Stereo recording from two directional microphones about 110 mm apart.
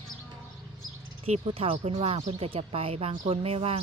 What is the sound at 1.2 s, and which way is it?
A woman's voice, 60° right (ahead or behind).